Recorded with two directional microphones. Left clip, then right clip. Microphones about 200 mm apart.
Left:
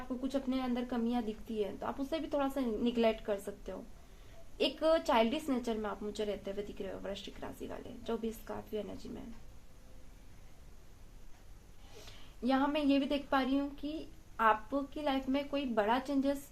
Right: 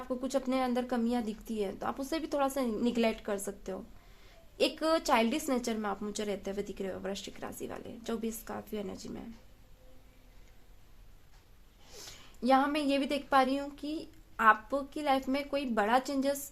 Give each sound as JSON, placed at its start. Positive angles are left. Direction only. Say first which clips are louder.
{"t": 0.2, "sound": "a woman's voice", "louder": "right 5 dB", "side_deg": -40}
{"t": 12.0, "sound": "a woman's voice", "louder": "right 6 dB", "side_deg": -40}